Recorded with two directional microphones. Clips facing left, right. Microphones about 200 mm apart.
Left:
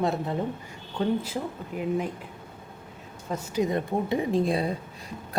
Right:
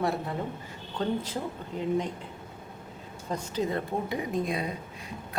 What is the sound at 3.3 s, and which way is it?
Speech, 10° left (ahead or behind).